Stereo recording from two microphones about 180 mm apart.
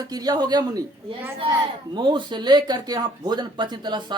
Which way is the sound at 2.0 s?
25° right (ahead or behind).